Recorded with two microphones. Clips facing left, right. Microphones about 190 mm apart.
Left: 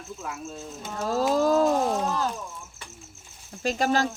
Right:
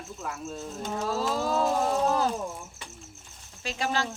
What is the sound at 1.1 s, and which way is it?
Speech, 45° left (ahead or behind).